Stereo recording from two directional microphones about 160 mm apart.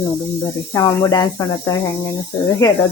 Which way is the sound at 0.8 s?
20° left (ahead or behind).